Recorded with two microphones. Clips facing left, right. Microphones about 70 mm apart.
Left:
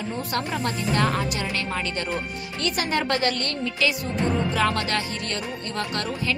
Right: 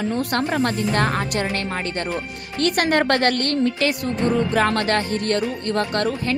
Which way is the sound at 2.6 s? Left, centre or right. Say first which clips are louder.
Right 6 dB; right.